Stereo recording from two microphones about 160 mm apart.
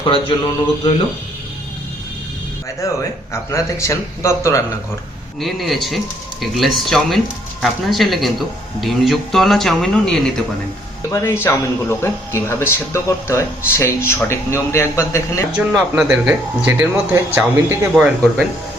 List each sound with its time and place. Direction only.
0.0 s mantra: 35° left (ahead or behind)
2.8 s speech: 20° left (ahead or behind)
5.4 s speech: centre (ahead or behind)
11.1 s speech: 15° left (ahead or behind)
15.7 s speech: 5° right (ahead or behind)